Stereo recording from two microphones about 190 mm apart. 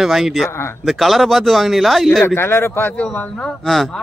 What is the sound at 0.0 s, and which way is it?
Speech, centre (ahead or behind).